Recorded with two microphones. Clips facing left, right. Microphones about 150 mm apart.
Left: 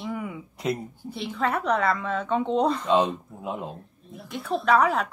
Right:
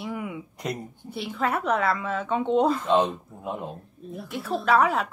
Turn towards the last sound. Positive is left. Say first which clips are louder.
# even
turn(degrees=0)  # may be behind; listen again after turning